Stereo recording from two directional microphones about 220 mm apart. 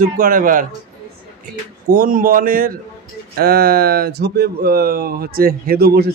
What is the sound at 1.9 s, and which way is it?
A man's voice, 40° right (ahead or behind).